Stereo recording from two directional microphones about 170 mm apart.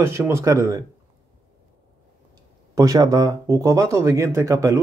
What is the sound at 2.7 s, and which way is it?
Speech, 20° right (ahead or behind).